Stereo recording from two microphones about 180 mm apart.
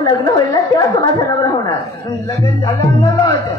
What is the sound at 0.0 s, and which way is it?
Speech, 20° left (ahead or behind).